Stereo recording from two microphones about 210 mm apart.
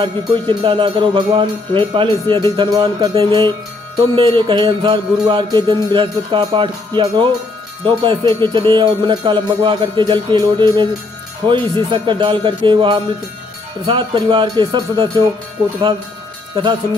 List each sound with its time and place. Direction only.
0.0 s music: 25° right (ahead or behind)